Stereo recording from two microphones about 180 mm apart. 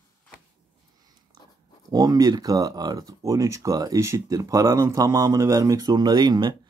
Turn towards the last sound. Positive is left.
turn(degrees=-25)  # may be behind; listen again after turning